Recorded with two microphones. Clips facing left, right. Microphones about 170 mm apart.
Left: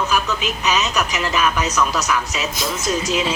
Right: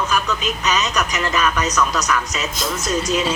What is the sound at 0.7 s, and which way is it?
A woman's voice, 10° left (ahead or behind).